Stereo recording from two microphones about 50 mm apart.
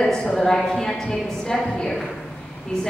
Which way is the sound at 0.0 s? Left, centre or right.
Centre.